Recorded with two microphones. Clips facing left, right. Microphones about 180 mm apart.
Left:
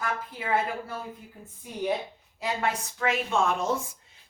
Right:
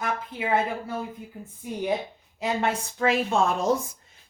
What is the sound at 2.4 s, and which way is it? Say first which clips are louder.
A woman's voice: right 3 dB; 25° right (ahead or behind).